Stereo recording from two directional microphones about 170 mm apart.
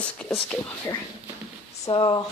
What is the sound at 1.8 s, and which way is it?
Speech, 25° left (ahead or behind).